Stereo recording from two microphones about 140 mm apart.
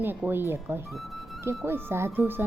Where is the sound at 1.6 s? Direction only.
15° right (ahead or behind).